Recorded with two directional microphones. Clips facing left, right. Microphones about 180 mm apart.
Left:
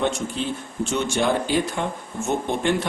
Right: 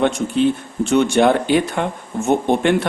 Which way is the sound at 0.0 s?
60° right (ahead or behind).